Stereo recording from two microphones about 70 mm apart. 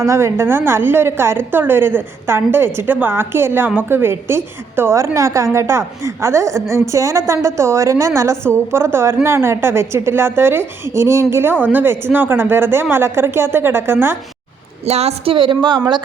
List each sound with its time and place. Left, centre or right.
0.0 s a woman's voice: right
11.6 s a woman's voice: right